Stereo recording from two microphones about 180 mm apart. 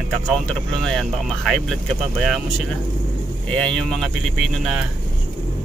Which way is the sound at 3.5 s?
5° left (ahead or behind).